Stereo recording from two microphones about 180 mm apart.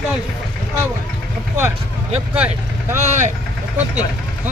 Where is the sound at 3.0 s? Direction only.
40° right (ahead or behind).